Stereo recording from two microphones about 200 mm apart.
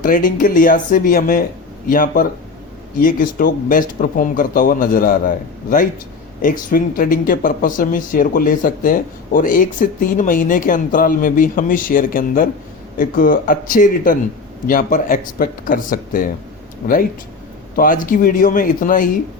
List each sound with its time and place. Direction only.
0.0 s speech: 40° left (ahead or behind)